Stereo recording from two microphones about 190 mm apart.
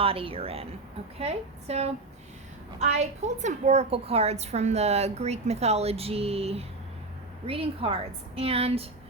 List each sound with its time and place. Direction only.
0.0 s a woman's voice: 30° right (ahead or behind)